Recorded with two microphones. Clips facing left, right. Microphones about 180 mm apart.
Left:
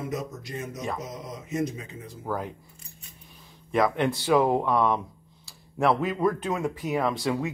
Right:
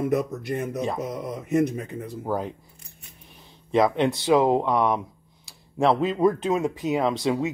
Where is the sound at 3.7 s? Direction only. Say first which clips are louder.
Right 3 dB; 20° right (ahead or behind).